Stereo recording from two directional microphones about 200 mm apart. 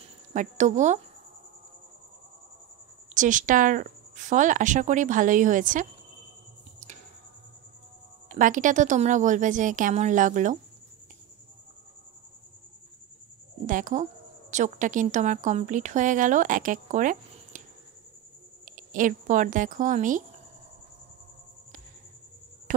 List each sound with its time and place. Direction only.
0.0 s speech: 35° right (ahead or behind)
3.2 s speech: 40° right (ahead or behind)
8.3 s speech: 40° right (ahead or behind)
13.7 s speech: 40° right (ahead or behind)
18.7 s speech: 40° right (ahead or behind)
22.7 s a sound: 40° right (ahead or behind)